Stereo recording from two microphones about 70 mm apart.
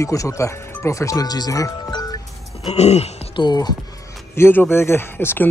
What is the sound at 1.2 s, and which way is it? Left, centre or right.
Speech, left.